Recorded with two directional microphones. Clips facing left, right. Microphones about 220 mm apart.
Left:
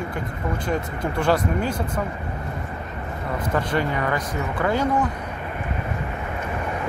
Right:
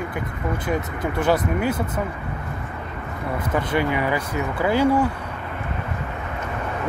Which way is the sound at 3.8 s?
10° right (ahead or behind).